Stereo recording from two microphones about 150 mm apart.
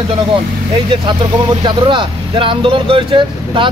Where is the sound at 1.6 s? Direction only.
35° right (ahead or behind).